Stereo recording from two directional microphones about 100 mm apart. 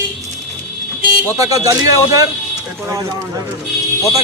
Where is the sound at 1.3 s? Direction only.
35° right (ahead or behind).